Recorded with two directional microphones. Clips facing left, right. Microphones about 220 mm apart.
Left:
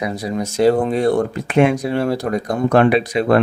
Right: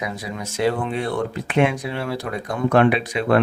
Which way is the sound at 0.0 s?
35° left (ahead or behind).